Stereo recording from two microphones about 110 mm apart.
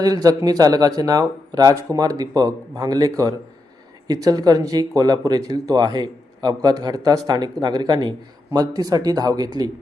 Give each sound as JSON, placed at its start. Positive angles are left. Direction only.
{"t": 0.0, "sound": "speech", "side_deg": -35}